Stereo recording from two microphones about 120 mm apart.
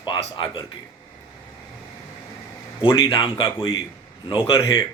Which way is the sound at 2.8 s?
45° left (ahead or behind).